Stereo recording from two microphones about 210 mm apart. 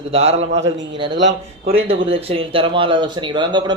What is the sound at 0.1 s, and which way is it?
Speech, 30° right (ahead or behind).